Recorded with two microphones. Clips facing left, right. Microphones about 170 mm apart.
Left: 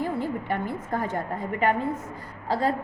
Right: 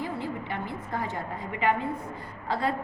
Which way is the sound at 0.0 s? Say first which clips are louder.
Left 5 dB; 45° left (ahead or behind).